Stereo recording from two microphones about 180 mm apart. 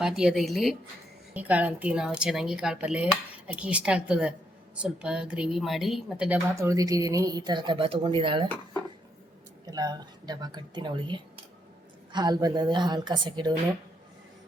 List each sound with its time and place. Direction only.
0.0 s a woman's voice: 5° right (ahead or behind); by 8.4 s 30° right (ahead or behind)
9.6 s speech: 20° right (ahead or behind)